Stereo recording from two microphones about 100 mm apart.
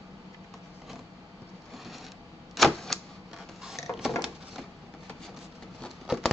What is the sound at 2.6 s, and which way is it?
Vehicle, centre (ahead or behind).